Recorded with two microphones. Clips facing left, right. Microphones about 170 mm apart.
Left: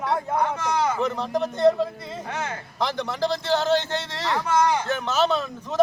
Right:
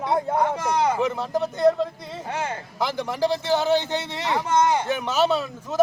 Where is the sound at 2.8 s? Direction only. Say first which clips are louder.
Right 1 dB; 5° right (ahead or behind); by 4.9 s 25° right (ahead or behind).